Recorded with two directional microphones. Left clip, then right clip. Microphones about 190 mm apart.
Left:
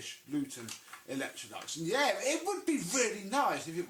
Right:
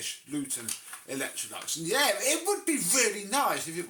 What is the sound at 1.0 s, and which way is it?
Speech, 15° right (ahead or behind).